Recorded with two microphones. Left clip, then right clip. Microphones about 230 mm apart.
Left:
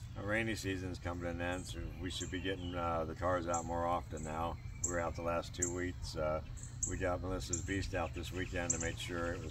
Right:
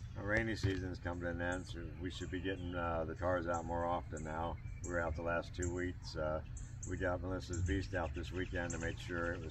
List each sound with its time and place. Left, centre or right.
0.2 s speech: left